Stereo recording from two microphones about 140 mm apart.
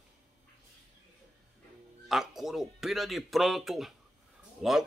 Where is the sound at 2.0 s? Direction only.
Centre (ahead or behind).